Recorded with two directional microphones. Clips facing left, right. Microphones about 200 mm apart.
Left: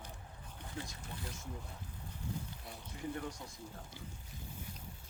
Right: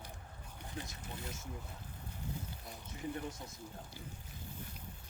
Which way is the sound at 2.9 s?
20° right (ahead or behind).